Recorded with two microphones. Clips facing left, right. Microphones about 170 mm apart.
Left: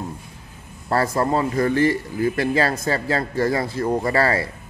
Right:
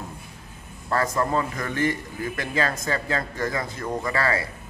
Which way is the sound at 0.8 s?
35° left (ahead or behind).